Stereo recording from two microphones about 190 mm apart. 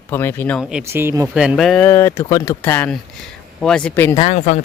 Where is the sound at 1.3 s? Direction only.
5° right (ahead or behind).